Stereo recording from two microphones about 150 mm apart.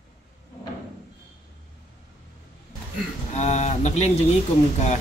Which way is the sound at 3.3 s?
50° left (ahead or behind).